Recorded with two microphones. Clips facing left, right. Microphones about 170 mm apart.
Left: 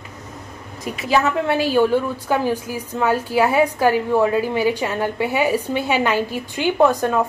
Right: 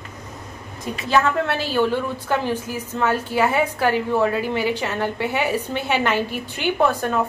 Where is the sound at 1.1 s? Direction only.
10° left (ahead or behind).